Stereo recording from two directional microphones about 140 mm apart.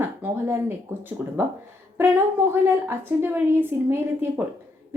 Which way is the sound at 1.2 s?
10° right (ahead or behind).